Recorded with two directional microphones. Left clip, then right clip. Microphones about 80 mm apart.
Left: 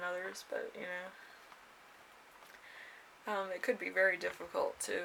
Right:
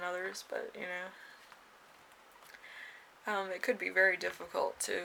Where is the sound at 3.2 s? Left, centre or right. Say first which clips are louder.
Right 2 dB; right.